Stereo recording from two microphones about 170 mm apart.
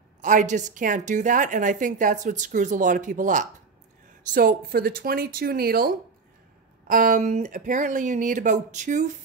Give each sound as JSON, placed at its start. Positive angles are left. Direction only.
{"t": 0.2, "sound": "a woman's voice", "side_deg": -50}
{"t": 4.3, "sound": "speech", "side_deg": -60}
{"t": 6.9, "sound": "a woman's voice", "side_deg": -55}